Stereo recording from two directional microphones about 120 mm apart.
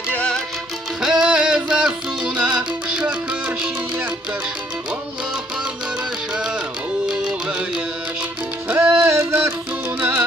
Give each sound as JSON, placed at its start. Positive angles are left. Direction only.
{"t": 0.1, "sound": "music", "side_deg": 5}
{"t": 1.0, "sound": "music", "side_deg": -5}
{"t": 6.3, "sound": "music", "side_deg": -5}
{"t": 8.6, "sound": "music", "side_deg": -15}